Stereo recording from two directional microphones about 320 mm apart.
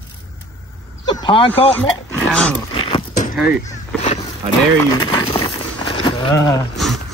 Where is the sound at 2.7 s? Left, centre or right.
Centre.